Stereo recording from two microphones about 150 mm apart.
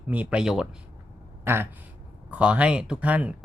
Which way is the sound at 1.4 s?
15° right (ahead or behind).